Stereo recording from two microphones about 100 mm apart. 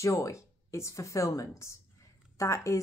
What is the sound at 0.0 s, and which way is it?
Speech, 30° left (ahead or behind).